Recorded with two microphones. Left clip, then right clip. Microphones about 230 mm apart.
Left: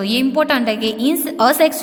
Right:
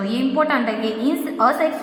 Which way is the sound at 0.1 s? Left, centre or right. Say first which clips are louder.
Left 3 dB; left.